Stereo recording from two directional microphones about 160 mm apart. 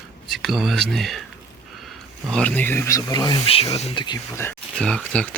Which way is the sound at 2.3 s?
10° left (ahead or behind).